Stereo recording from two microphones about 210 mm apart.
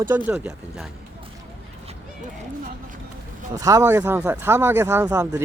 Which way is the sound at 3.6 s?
15° right (ahead or behind).